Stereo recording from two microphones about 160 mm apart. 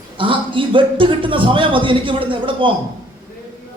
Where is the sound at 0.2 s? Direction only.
30° right (ahead or behind).